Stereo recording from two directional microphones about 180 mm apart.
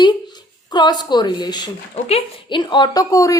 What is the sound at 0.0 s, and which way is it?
A woman's voice, 25° left (ahead or behind).